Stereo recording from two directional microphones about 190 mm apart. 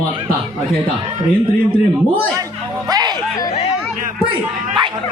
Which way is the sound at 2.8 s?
20° right (ahead or behind).